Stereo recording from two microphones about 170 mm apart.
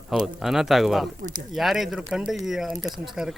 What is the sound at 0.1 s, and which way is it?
Speech, centre (ahead or behind).